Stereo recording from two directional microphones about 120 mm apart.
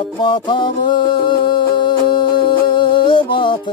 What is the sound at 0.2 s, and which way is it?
Music, 40° left (ahead or behind).